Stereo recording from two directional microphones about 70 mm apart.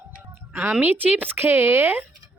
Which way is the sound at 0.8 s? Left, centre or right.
Right.